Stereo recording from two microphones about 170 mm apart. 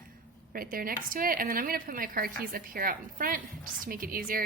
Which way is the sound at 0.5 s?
55° right (ahead or behind).